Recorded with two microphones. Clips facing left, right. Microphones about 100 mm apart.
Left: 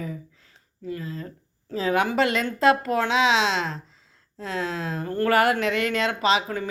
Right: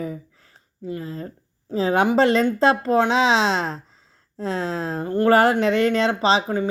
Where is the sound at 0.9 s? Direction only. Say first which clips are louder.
Right 3 dB; 30° right (ahead or behind).